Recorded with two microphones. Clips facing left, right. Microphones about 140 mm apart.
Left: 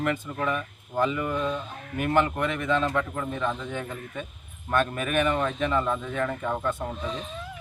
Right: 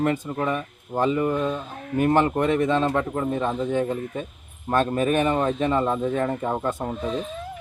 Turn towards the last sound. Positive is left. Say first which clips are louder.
# right 4 dB
turn(degrees=-40)  # may be behind; listen again after turning